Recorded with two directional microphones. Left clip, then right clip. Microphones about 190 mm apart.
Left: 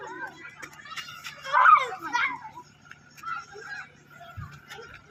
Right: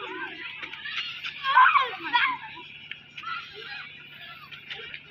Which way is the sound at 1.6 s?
15° left (ahead or behind).